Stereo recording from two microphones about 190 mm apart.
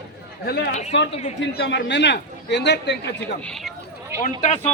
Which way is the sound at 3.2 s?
5° left (ahead or behind).